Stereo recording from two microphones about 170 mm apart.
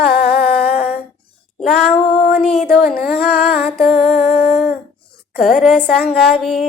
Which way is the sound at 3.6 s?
Centre (ahead or behind).